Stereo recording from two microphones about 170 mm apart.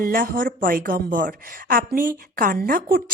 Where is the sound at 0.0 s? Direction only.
55° right (ahead or behind).